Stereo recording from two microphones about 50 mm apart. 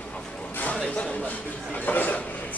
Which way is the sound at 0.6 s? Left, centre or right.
Left.